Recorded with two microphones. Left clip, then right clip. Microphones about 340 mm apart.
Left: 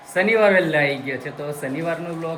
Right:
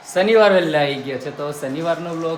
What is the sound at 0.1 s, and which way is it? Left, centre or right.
Speech, centre.